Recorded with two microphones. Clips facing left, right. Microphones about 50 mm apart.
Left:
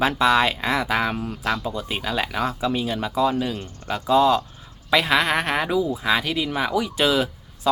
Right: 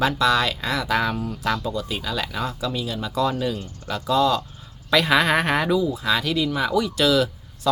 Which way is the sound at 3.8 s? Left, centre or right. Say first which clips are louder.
Left 2 dB; left.